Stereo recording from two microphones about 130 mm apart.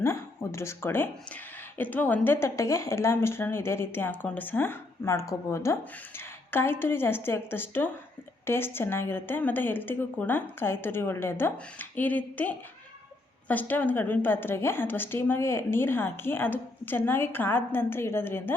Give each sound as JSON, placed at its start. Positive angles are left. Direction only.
{"t": 0.0, "sound": "a woman's voice", "side_deg": 20}